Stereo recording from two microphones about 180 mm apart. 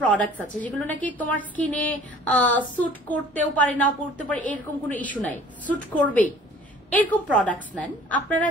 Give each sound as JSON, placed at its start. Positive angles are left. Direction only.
{"t": 0.0, "sound": "a woman's voice", "side_deg": 10}